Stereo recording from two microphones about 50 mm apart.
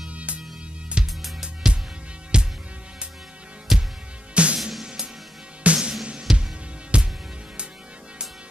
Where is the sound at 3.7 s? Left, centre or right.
Centre.